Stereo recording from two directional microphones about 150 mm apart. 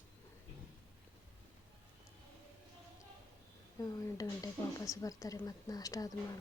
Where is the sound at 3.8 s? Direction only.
25° left (ahead or behind).